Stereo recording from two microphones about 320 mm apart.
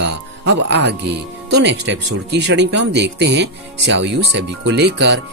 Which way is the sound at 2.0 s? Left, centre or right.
Right.